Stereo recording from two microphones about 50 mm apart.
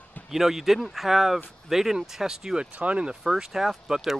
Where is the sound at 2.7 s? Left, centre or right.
Right.